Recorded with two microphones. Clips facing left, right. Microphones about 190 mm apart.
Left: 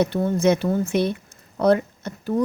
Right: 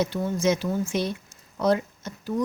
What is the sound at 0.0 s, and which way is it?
Speech, 55° left (ahead or behind).